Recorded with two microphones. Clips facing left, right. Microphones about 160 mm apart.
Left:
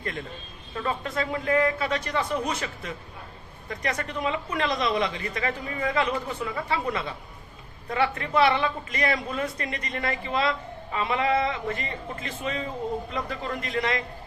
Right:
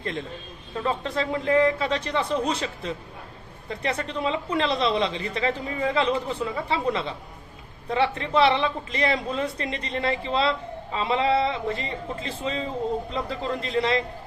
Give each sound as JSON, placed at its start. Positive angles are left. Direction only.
{"t": 0.0, "sound": "a man's voice", "side_deg": -25}
{"t": 7.9, "sound": "a man's voice", "side_deg": -25}